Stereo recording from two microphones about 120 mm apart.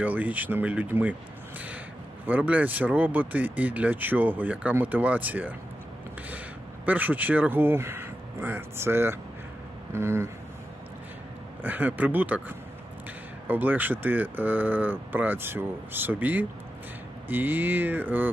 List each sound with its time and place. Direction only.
0.0 s speech: 15° right (ahead or behind)
1.5 s a sound: 15° right (ahead or behind)
2.2 s speech: 15° right (ahead or behind)
6.8 s speech: 15° right (ahead or behind)
11.6 s speech: 15° right (ahead or behind)